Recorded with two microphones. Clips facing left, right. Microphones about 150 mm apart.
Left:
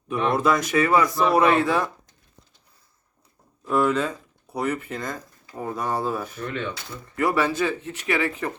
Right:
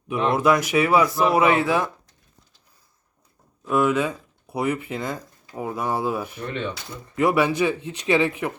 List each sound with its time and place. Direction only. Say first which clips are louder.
0.1 s speech: right 2 dB; 5° right (ahead or behind)
3.7 s speech: right 1 dB; 10° right (ahead or behind)